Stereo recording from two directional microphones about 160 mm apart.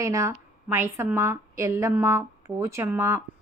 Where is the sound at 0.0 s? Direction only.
20° right (ahead or behind).